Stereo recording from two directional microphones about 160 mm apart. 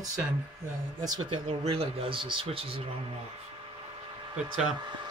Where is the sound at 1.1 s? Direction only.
35° right (ahead or behind).